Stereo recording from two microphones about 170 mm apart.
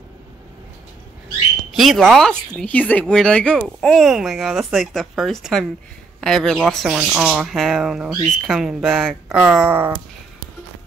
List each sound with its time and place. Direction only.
1.8 s a woman's voice: centre (ahead or behind)